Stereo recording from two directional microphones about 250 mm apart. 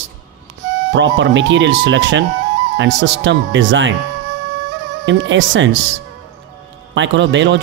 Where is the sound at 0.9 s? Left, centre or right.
Right.